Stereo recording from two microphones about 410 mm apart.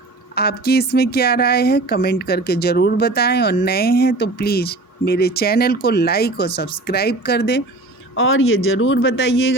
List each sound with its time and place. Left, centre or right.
0.3 s speech: left